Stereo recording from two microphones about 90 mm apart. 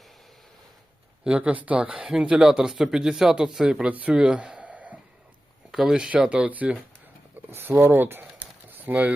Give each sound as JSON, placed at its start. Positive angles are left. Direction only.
{"t": 1.2, "sound": "speech", "side_deg": -10}
{"t": 5.7, "sound": "speech", "side_deg": -5}
{"t": 7.5, "sound": "speech", "side_deg": -30}